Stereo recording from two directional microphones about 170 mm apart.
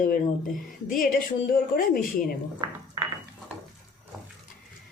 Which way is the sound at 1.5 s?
55° left (ahead or behind).